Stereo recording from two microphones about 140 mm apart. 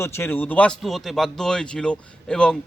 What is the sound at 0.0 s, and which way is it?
Speech, 15° left (ahead or behind).